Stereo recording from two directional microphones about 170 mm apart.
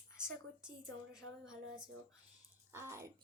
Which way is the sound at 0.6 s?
5° right (ahead or behind).